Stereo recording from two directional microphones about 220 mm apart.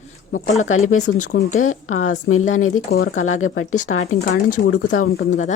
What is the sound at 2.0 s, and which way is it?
Speech, 35° left (ahead or behind).